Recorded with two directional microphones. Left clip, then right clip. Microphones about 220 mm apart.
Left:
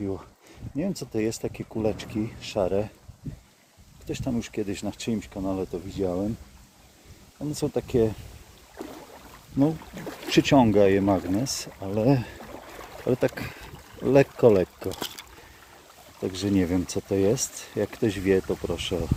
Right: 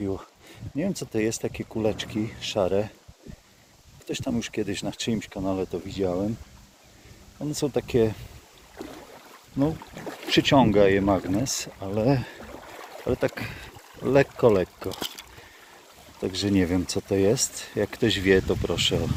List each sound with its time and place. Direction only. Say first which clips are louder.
0.0 s speech: right 1 dB; 5° right (ahead or behind)
4.0 s speech: right 1 dB; centre (ahead or behind)
7.4 s speech: right 1 dB; 5° left (ahead or behind)
10.3 s speech: even; 25° left (ahead or behind)
11.0 s speech: even; 5° left (ahead or behind)
11.9 s speech: left 1 dB; 30° left (ahead or behind)
14.9 s speech: right 1 dB; centre (ahead or behind)
16.2 s speech: right 1 dB; 5° left (ahead or behind)